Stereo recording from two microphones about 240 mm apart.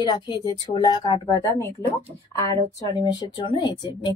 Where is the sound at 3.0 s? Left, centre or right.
Centre.